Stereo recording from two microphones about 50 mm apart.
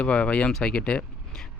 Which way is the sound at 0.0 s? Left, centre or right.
Left.